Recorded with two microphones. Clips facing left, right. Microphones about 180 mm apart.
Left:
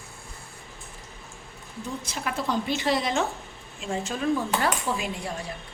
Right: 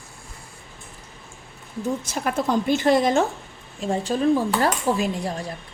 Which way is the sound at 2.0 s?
45° right (ahead or behind).